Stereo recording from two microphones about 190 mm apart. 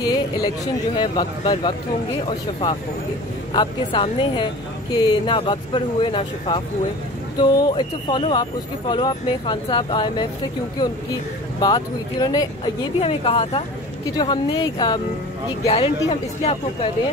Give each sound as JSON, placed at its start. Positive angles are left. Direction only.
{"t": 0.9, "sound": "speech", "side_deg": 25}
{"t": 11.6, "sound": "speech", "side_deg": 20}